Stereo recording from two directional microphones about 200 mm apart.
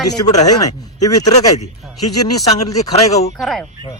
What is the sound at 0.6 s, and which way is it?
Speech, 20° left (ahead or behind).